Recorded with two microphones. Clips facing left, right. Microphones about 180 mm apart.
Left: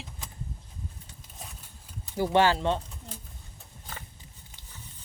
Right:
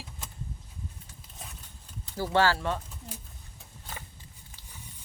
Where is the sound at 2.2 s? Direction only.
20° left (ahead or behind).